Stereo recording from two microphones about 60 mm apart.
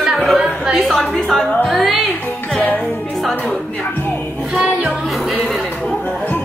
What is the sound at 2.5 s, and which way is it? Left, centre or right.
Music, centre.